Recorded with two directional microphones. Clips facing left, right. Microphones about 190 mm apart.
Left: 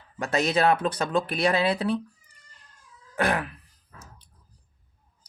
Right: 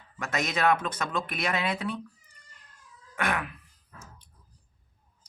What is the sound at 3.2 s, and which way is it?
Groan, 35° left (ahead or behind).